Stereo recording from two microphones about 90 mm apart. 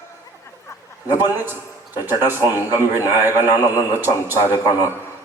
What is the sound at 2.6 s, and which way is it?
Speech, 40° left (ahead or behind).